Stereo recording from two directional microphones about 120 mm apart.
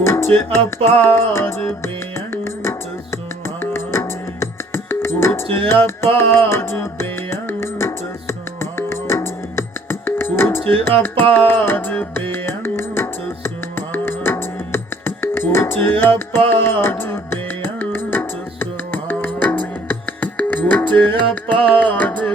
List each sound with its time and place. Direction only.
0.0 s music: 20° left (ahead or behind)
0.6 s music: 50° right (ahead or behind)
1.0 s music: 20° left (ahead or behind)